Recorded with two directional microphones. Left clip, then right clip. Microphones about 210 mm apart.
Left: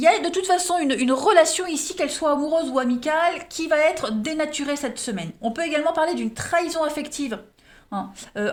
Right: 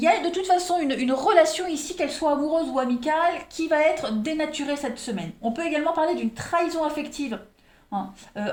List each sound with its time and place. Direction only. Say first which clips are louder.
0.0 s a woman's voice: left 3 dB; 45° left (ahead or behind)
8.4 s a woman's voice: left 4 dB; 45° left (ahead or behind)